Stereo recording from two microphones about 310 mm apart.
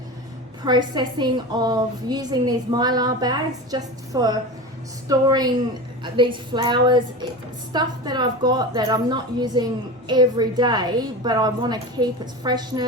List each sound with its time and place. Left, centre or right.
0.6 s a woman's voice: centre